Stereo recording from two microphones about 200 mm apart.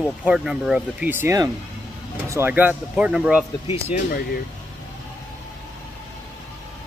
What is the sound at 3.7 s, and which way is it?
Speech, 30° left (ahead or behind).